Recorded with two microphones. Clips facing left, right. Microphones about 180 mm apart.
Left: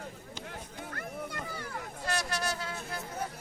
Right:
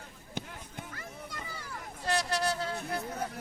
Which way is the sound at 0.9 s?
60° left (ahead or behind).